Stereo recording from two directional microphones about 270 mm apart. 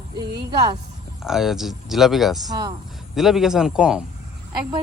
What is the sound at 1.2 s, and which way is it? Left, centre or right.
Speech, centre.